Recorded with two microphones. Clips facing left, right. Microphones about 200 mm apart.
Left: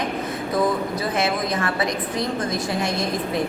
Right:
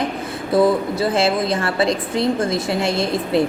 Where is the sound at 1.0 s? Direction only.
30° right (ahead or behind).